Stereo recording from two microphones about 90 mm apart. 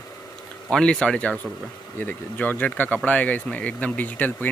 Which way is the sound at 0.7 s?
10° left (ahead or behind).